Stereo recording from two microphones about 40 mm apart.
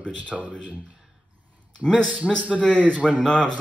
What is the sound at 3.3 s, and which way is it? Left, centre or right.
Speech, left.